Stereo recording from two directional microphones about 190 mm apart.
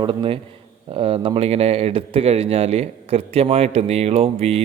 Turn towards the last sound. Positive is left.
turn(degrees=-35)  # may be behind; listen again after turning